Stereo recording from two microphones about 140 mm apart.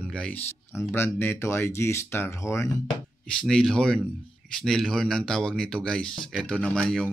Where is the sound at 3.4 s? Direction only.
5° left (ahead or behind).